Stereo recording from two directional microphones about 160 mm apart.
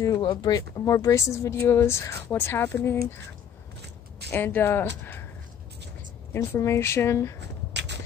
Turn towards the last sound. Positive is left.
turn(degrees=-90)